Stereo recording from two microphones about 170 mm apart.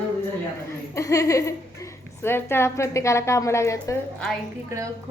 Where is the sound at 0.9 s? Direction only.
20° left (ahead or behind).